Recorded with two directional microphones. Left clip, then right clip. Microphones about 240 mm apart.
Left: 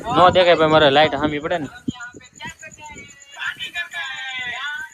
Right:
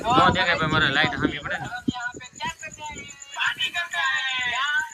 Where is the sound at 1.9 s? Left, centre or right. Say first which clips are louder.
Right 3 dB; right.